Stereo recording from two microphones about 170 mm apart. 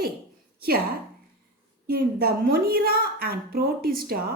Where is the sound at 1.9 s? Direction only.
60° right (ahead or behind).